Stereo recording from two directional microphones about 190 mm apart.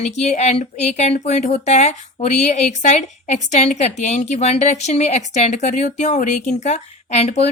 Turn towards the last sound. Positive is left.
turn(degrees=35)  # may be behind; listen again after turning